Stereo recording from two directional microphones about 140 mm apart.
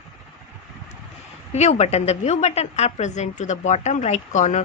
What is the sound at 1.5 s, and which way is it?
A woman's voice, 50° left (ahead or behind).